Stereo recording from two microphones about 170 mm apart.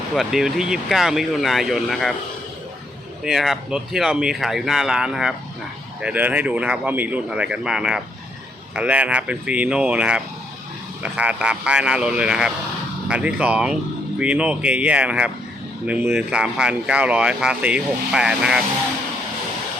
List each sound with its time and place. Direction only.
0.1 s speech: centre (ahead or behind)
3.2 s speech: centre (ahead or behind)